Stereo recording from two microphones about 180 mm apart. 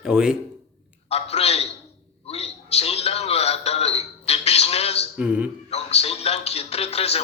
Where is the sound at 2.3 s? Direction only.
35° left (ahead or behind).